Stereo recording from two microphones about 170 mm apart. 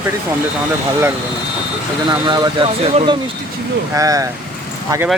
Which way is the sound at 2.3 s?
25° right (ahead or behind).